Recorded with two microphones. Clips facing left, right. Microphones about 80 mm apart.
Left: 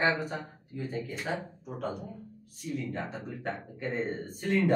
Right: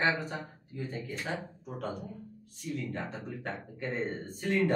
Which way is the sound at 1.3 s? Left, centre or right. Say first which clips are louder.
Left 3 dB; centre.